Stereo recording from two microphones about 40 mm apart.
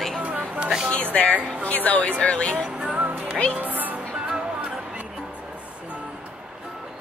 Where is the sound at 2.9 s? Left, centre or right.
Right.